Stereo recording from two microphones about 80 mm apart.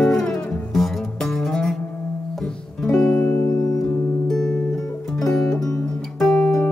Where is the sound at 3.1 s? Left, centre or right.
Left.